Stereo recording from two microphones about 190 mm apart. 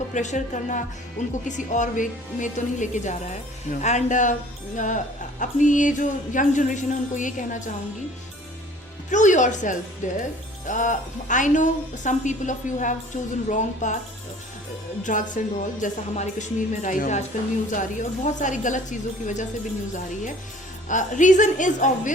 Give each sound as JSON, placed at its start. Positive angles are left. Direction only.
{"t": 0.1, "sound": "a woman's voice", "side_deg": 40}
{"t": 9.0, "sound": "a woman's voice", "side_deg": 40}
{"t": 15.0, "sound": "a woman's voice", "side_deg": 40}